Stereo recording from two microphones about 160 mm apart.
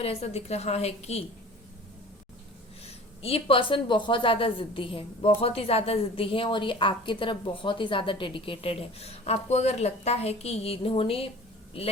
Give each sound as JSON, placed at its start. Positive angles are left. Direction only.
{"t": 0.0, "sound": "speech", "side_deg": 40}
{"t": 2.8, "sound": "speech", "side_deg": 40}